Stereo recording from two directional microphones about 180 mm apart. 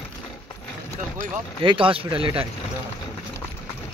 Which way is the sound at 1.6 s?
30° right (ahead or behind).